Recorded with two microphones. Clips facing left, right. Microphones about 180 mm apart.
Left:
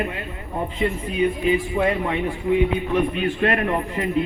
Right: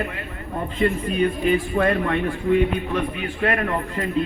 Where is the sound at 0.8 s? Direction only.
10° left (ahead or behind).